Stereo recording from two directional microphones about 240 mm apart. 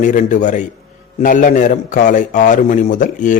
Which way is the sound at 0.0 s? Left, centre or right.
Left.